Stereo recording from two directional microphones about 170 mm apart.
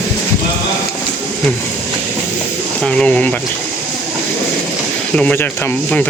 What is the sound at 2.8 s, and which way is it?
Speech, 5° left (ahead or behind).